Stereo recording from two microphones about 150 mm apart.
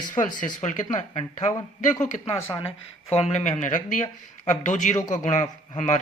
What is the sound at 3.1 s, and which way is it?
Speech, 45° left (ahead or behind).